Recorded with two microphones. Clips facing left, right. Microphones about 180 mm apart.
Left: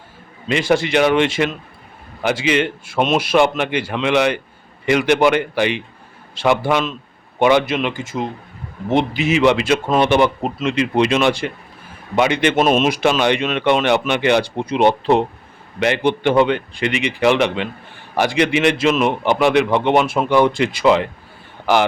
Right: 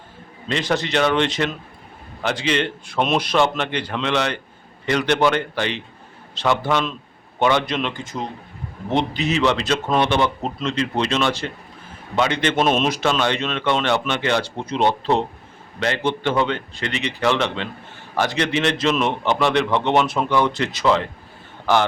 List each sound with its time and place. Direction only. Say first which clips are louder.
0.4 s a man's voice: left 5 dB; 10° left (ahead or behind)